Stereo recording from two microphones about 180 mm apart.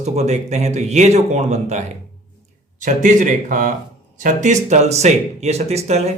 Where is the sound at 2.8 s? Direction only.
45° right (ahead or behind).